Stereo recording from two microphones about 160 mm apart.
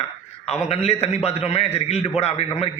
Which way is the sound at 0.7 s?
40° left (ahead or behind).